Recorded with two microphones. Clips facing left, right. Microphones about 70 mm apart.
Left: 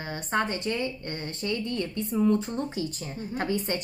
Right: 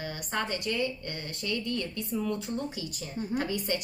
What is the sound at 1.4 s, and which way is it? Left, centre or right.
A woman's voice, left.